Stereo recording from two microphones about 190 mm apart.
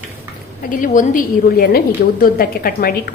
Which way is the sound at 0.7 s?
45° left (ahead or behind).